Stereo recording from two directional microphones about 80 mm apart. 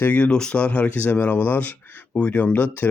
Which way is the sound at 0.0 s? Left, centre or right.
Centre.